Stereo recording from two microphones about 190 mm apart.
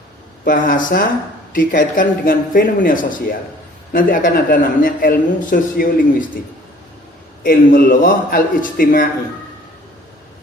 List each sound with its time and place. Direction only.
0.4 s a man's voice: 45° left (ahead or behind)
7.4 s a man's voice: 45° left (ahead or behind)